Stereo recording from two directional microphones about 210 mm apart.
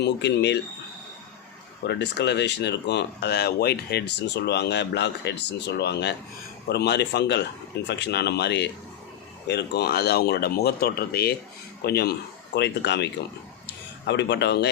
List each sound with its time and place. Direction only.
0.0 s speech: 55° left (ahead or behind)
1.9 s speech: 55° left (ahead or behind)
14.1 s speech: 55° left (ahead or behind)